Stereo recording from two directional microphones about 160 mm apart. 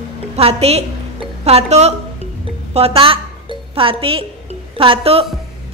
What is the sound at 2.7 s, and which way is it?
A woman's voice, 35° right (ahead or behind).